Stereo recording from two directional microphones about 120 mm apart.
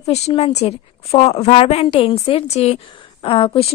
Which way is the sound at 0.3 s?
55° left (ahead or behind).